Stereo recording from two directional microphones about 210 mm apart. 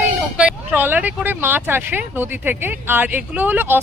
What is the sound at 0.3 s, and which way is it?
Speech, 10° right (ahead or behind).